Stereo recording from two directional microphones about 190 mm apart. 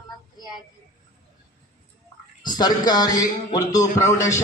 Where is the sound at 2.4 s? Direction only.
20° left (ahead or behind).